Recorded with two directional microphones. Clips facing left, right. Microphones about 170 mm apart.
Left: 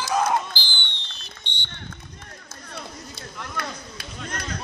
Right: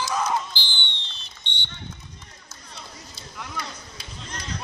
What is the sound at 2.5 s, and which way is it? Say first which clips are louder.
Run: left 6 dB; 55° left (ahead or behind).